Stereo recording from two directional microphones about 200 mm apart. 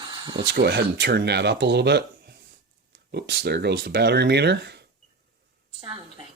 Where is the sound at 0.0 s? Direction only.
25° right (ahead or behind).